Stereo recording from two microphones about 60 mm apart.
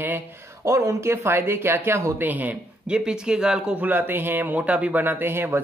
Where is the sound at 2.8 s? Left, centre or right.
Centre.